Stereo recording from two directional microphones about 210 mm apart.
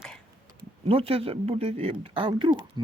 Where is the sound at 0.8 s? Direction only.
25° right (ahead or behind).